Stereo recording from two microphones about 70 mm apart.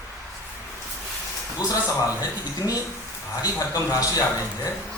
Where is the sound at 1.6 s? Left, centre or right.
Left.